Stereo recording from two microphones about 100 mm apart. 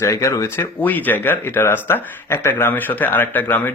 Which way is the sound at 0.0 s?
30° left (ahead or behind).